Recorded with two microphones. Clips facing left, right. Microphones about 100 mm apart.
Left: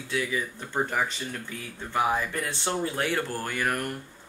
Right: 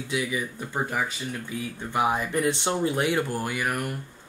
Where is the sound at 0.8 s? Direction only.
5° right (ahead or behind).